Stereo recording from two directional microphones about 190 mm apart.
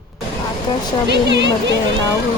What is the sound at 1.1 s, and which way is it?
Speech, 65° right (ahead or behind).